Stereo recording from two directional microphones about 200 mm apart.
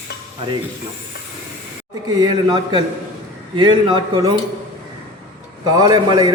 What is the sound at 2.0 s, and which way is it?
Speech, 20° right (ahead or behind).